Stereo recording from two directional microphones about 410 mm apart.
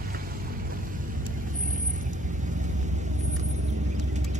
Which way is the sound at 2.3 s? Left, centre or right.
Centre.